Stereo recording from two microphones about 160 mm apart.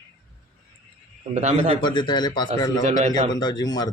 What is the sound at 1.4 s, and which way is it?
Speech, 45° right (ahead or behind).